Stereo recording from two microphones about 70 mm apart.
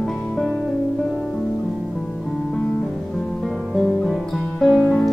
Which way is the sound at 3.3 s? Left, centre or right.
Centre.